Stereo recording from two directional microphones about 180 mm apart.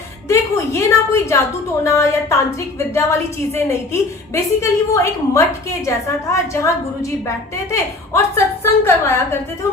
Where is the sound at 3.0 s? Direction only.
15° left (ahead or behind).